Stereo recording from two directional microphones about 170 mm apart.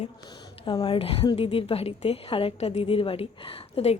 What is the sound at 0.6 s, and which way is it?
Speech, 30° left (ahead or behind).